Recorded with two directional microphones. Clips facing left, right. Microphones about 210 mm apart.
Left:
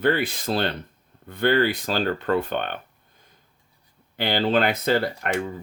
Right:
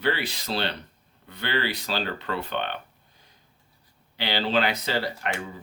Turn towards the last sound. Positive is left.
turn(degrees=50)  # may be behind; listen again after turning